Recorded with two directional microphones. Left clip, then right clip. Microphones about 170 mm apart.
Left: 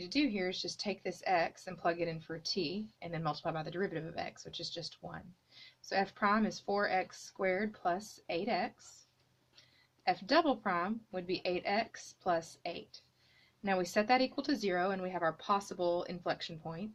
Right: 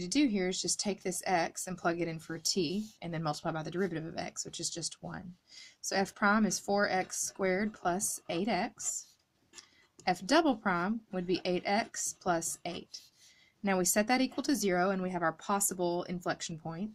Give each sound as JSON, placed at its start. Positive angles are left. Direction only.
{"t": 0.0, "sound": "speech", "side_deg": -40}
{"t": 10.0, "sound": "speech", "side_deg": -40}